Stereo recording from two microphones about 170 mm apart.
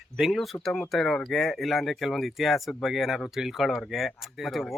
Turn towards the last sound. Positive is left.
turn(degrees=0)  # may be behind; listen again after turning